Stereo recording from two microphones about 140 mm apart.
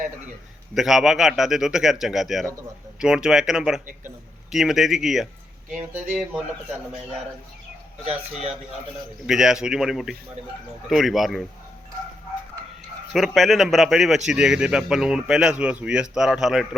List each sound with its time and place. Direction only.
0.7 s speech: 5° right (ahead or behind)
8.0 s speech: 50° right (ahead or behind)
9.2 s speech: 5° right (ahead or behind)
13.1 s speech: centre (ahead or behind)